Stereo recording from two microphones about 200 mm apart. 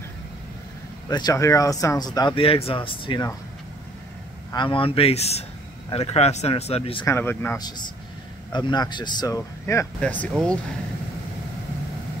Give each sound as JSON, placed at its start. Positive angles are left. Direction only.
{"t": 1.1, "sound": "speech", "side_deg": 20}
{"t": 4.5, "sound": "speech", "side_deg": 25}
{"t": 7.1, "sound": "speech", "side_deg": 10}